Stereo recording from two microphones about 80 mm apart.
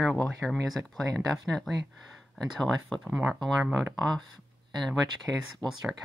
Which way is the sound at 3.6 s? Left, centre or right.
Right.